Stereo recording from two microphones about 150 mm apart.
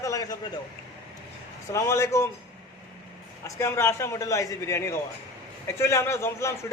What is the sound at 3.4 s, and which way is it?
A man's voice, 20° left (ahead or behind).